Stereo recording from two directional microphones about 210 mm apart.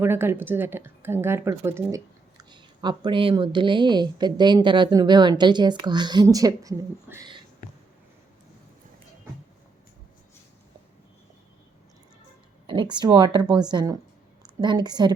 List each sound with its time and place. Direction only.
0.0 s speech: 10° right (ahead or behind)
12.6 s speech: 20° right (ahead or behind)